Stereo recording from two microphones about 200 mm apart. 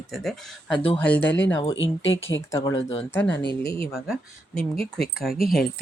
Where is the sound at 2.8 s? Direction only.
30° left (ahead or behind).